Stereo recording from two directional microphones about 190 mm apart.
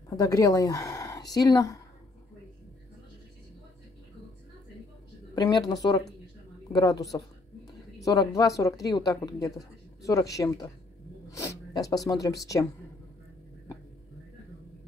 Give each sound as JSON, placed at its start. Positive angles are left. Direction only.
{"t": 0.1, "sound": "speech", "side_deg": 20}
{"t": 5.3, "sound": "a woman's voice", "side_deg": 20}